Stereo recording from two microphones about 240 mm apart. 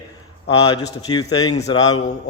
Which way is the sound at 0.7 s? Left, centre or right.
Centre.